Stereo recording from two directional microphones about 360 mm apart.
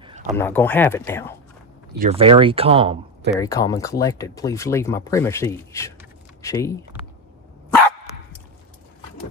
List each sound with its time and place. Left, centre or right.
0.0 s a sound: centre
0.4 s speech: centre
2.0 s speech: centre
3.3 s speech: centre